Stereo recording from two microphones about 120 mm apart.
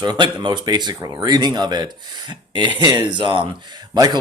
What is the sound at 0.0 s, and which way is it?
Speech, 35° right (ahead or behind).